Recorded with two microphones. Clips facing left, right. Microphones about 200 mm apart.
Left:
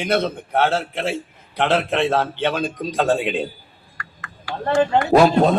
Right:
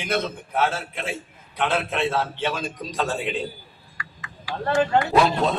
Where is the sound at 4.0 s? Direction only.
55° left (ahead or behind).